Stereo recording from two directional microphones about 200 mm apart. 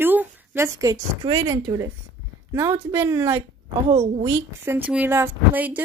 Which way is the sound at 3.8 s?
30° right (ahead or behind).